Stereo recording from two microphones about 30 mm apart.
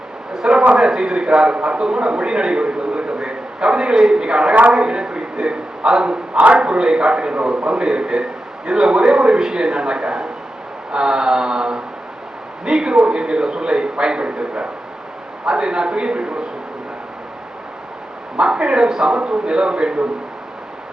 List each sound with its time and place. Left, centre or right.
0.4 s a sound: right
0.8 s a man's voice: right
18.3 s a man's voice: right